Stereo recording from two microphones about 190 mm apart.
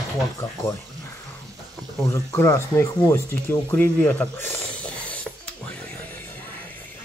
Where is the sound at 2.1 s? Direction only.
15° left (ahead or behind).